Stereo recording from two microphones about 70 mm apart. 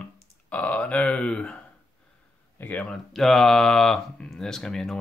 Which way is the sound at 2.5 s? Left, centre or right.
Left.